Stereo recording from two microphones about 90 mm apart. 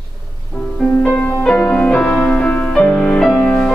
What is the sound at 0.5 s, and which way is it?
Music, 10° left (ahead or behind).